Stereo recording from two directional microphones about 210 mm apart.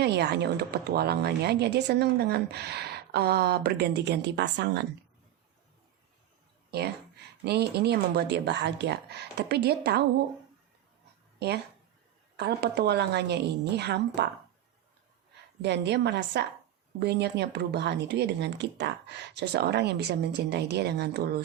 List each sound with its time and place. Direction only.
0.0 s speech: 55° right (ahead or behind)
6.7 s speech: 50° right (ahead or behind)
11.3 s speech: 50° right (ahead or behind)
15.6 s a woman's voice: 55° right (ahead or behind)